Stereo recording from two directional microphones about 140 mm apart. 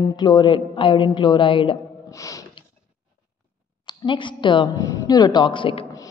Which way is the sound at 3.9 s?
35° left (ahead or behind).